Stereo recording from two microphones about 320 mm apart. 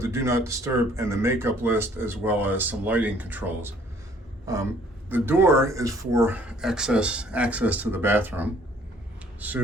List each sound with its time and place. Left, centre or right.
0.0 s speech: centre